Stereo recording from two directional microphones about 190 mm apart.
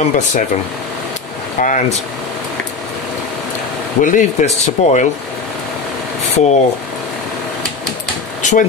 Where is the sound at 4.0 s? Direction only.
45° left (ahead or behind).